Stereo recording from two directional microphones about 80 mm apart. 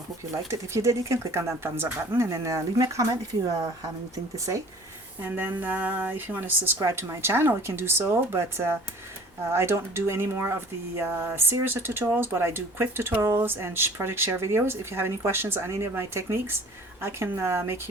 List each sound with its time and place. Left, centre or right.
0.5 s speech: right
5.2 s a woman's voice: right
6.7 s speech: right